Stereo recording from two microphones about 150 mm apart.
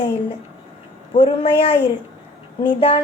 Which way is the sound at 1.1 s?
35° left (ahead or behind).